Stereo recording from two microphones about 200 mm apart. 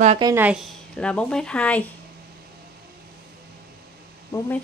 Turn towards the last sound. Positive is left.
turn(degrees=15)  # may be behind; listen again after turning